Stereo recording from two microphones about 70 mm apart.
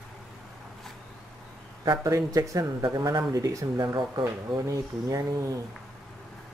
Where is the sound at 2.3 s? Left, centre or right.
Right.